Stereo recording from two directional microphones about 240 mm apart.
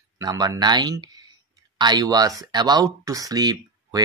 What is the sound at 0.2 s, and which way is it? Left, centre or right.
Speech, centre.